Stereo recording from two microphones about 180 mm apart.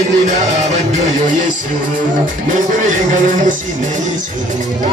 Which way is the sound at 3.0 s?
45° right (ahead or behind).